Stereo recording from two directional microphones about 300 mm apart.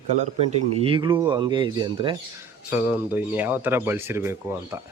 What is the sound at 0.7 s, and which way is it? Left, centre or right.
A man's voice, centre.